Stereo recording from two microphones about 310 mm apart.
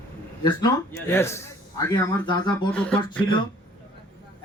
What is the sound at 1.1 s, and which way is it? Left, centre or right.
Speech, centre.